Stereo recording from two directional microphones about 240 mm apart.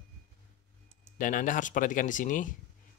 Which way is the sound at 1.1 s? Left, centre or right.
Left.